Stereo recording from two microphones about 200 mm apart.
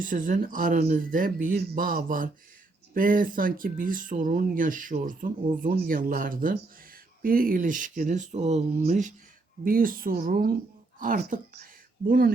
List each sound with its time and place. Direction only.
0.0 s speech: 45° right (ahead or behind)